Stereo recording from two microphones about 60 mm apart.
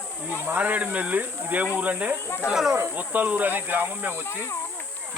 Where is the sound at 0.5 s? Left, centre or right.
Right.